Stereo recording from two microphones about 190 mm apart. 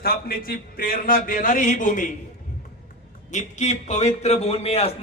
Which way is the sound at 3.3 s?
40° left (ahead or behind).